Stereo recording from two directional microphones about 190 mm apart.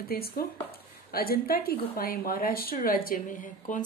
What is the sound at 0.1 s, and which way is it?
A woman's voice, 50° left (ahead or behind).